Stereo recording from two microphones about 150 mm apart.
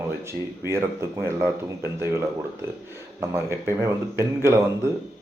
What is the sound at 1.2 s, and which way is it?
Speech, 15° right (ahead or behind).